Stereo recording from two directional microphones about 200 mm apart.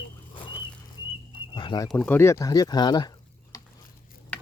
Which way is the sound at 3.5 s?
20° left (ahead or behind).